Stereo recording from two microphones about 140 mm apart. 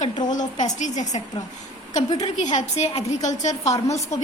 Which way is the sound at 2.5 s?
55° left (ahead or behind).